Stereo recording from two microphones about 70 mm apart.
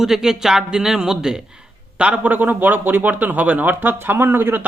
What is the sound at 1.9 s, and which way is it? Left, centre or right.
A man's voice, right.